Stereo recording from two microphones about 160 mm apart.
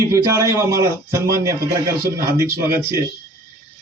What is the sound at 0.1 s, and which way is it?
A man's voice, 20° right (ahead or behind).